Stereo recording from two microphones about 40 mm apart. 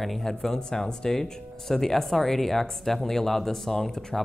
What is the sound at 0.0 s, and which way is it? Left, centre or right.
Speech, centre.